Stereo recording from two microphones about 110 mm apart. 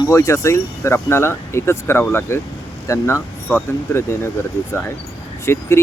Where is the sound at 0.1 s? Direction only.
25° left (ahead or behind).